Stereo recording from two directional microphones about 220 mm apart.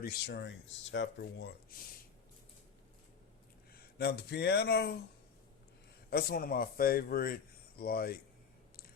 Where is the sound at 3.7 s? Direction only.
45° left (ahead or behind).